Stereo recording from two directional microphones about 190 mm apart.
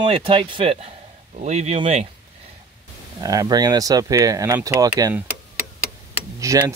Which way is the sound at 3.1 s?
20° right (ahead or behind).